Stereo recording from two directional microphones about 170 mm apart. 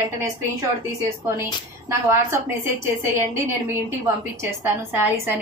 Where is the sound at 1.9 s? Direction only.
15° right (ahead or behind).